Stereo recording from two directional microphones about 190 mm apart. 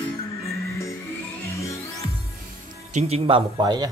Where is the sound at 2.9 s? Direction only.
35° right (ahead or behind).